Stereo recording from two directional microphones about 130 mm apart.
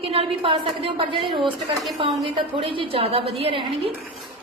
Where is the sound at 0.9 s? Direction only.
40° right (ahead or behind).